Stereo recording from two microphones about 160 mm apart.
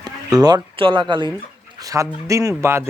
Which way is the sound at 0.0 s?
25° right (ahead or behind).